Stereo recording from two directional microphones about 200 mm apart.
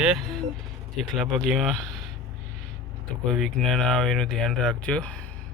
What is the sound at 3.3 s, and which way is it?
Speech, centre (ahead or behind).